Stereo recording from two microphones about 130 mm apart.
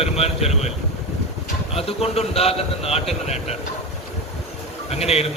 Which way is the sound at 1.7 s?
55° left (ahead or behind).